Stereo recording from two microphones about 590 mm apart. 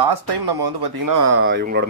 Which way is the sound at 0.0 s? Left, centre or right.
Right.